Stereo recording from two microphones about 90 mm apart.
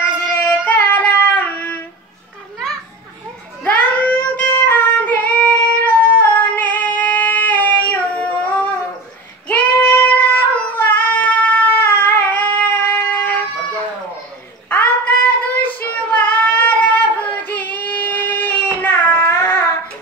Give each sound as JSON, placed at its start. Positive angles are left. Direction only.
{"t": 0.0, "sound": "singing", "side_deg": 20}
{"t": 3.6, "sound": "child singing", "side_deg": 20}
{"t": 14.7, "sound": "child singing", "side_deg": 20}